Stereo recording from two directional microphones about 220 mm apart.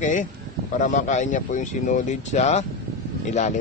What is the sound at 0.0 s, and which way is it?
A man's voice, 35° left (ahead or behind).